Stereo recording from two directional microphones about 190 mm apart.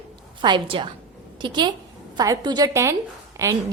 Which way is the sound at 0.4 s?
25° right (ahead or behind).